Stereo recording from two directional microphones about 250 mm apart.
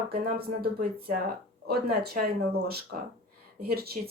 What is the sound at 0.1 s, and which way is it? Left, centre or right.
Speech, right.